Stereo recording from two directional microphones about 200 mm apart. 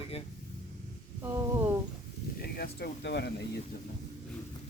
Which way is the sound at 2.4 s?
50° left (ahead or behind).